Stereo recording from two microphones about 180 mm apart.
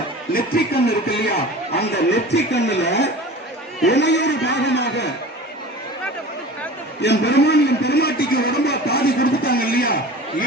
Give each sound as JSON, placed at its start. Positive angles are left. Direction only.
{"t": 0.3, "sound": "a man's voice", "side_deg": 60}
{"t": 7.0, "sound": "a man's voice", "side_deg": 70}